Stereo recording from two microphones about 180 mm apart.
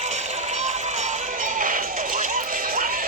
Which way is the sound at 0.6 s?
40° right (ahead or behind).